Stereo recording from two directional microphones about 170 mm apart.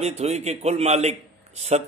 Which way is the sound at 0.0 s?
40° right (ahead or behind).